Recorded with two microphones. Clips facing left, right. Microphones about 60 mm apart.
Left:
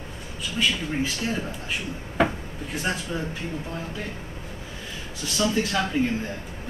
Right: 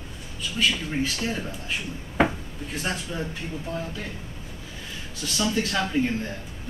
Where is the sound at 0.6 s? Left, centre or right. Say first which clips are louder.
Even; centre.